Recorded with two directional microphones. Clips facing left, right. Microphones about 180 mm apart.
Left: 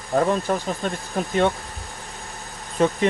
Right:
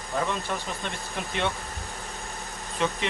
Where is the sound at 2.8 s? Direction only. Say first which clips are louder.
Left 8 dB; 45° left (ahead or behind).